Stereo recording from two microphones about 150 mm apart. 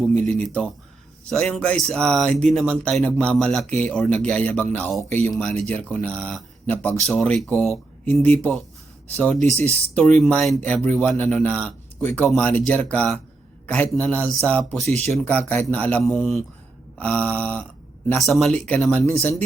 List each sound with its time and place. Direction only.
0.1 s speech: 10° left (ahead or behind)
4.8 s speech: centre (ahead or behind)
9.3 s speech: 45° right (ahead or behind)
9.9 s speech: 10° left (ahead or behind)
14.8 s speech: 45° right (ahead or behind)
15.3 s speech: 10° left (ahead or behind)